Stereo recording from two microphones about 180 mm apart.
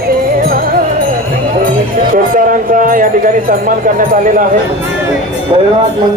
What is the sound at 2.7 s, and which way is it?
Speech, 50° right (ahead or behind).